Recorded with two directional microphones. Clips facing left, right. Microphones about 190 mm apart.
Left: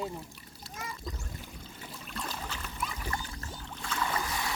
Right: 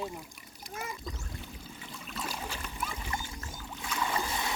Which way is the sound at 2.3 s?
10° right (ahead or behind).